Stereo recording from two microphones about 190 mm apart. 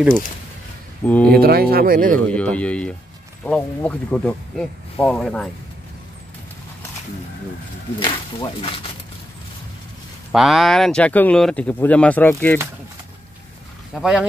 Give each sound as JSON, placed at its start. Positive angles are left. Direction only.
{"t": 1.0, "sound": "speech", "side_deg": 10}
{"t": 1.3, "sound": "speech", "side_deg": -55}
{"t": 2.1, "sound": "speech", "side_deg": 5}
{"t": 8.0, "sound": "speech", "side_deg": 25}
{"t": 10.3, "sound": "speech", "side_deg": 0}
{"t": 13.9, "sound": "speech", "side_deg": -5}